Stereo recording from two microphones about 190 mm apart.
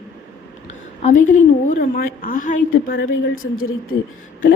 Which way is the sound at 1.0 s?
40° left (ahead or behind).